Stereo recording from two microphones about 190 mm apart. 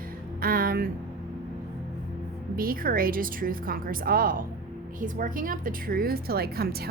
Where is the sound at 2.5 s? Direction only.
50° right (ahead or behind).